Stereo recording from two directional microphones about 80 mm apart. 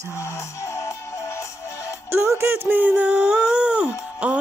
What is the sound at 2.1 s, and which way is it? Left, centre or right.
Speech, right.